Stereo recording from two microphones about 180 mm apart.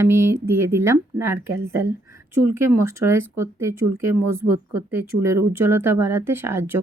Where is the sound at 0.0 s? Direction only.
15° right (ahead or behind).